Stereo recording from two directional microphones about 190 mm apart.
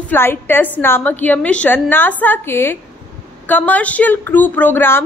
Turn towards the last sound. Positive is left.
turn(degrees=10)  # may be behind; listen again after turning